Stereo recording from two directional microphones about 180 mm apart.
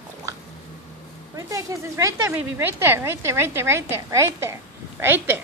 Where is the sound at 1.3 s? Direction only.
20° right (ahead or behind).